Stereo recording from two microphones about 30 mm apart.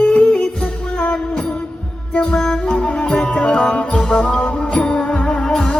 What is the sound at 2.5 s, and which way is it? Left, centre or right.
Music, left.